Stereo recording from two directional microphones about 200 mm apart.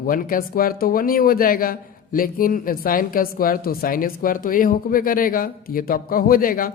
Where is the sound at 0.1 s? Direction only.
45° left (ahead or behind).